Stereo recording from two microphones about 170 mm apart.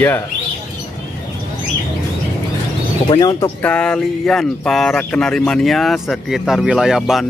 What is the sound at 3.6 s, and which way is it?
Speech, 5° left (ahead or behind).